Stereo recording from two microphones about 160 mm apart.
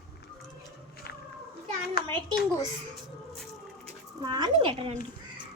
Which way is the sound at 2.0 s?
80° left.